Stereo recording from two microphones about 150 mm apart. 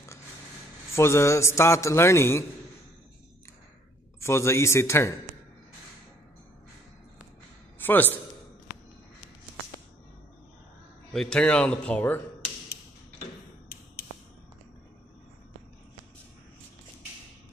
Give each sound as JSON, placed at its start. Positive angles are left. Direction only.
{"t": 0.9, "sound": "a man's voice", "side_deg": 20}
{"t": 4.2, "sound": "a man's voice", "side_deg": 20}
{"t": 7.8, "sound": "a man's voice", "side_deg": 10}
{"t": 11.1, "sound": "speech", "side_deg": 5}